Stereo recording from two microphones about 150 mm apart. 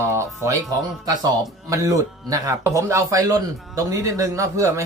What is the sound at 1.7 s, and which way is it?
Speech, 20° right (ahead or behind).